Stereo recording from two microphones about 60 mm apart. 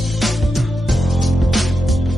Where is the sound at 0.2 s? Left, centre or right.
Centre.